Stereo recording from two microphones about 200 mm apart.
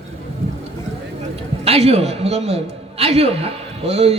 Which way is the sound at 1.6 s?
30° right (ahead or behind).